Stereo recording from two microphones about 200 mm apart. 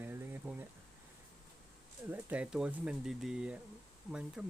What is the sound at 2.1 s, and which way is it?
Speech, 5° right (ahead or behind).